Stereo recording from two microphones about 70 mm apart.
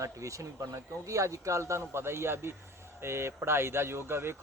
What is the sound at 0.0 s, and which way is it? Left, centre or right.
Speech, right.